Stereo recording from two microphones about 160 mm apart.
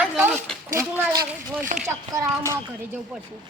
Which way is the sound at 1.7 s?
55° right (ahead or behind).